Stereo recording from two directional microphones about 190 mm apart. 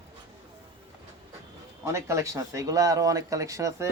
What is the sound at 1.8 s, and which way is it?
A man's voice, 15° right (ahead or behind).